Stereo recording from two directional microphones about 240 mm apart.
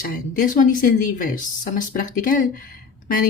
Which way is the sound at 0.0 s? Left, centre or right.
Left.